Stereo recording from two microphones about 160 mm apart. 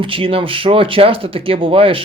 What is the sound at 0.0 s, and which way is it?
Speech, 35° right (ahead or behind).